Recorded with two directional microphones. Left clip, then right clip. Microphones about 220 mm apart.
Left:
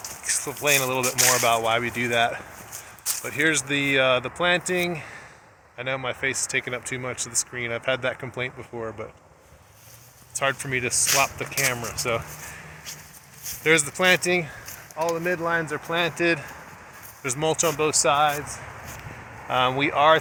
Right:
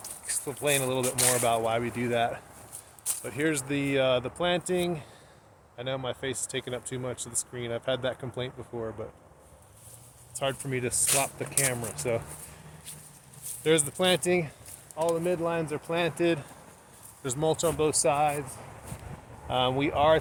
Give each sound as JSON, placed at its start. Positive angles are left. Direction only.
{"t": 0.0, "sound": "speech", "side_deg": 5}
{"t": 8.7, "sound": "speech", "side_deg": 25}
{"t": 10.3, "sound": "speech", "side_deg": 5}
{"t": 13.7, "sound": "speech", "side_deg": 10}
{"t": 17.3, "sound": "speech", "side_deg": 40}
{"t": 17.7, "sound": "speech", "side_deg": 5}
{"t": 19.5, "sound": "speech", "side_deg": 10}